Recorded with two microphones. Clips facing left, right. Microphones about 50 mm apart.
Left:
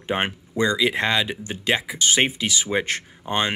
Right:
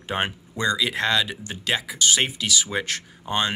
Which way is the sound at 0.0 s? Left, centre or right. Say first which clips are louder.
Left 2 dB; left.